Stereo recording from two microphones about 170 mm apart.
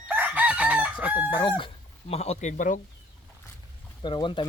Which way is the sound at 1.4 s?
30° left (ahead or behind).